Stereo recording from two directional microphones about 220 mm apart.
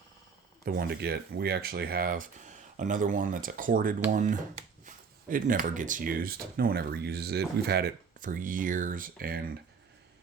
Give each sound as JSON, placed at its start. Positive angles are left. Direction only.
{"t": 0.6, "sound": "speech", "side_deg": -45}